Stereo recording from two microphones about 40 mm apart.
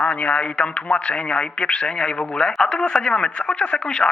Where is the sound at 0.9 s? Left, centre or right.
Left.